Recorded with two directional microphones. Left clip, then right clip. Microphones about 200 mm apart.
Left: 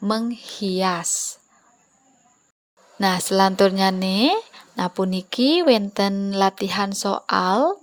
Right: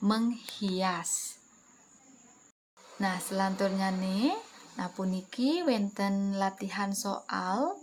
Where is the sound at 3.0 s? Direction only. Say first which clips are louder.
Left 13 dB; 45° left (ahead or behind).